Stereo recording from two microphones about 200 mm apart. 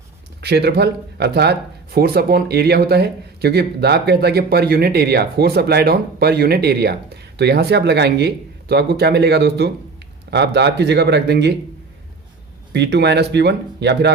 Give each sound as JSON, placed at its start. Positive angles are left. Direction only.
{"t": 0.4, "sound": "speech", "side_deg": -55}
{"t": 12.7, "sound": "speech", "side_deg": -60}